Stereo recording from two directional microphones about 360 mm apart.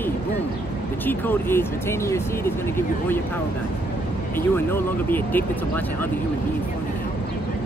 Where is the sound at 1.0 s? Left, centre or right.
Centre.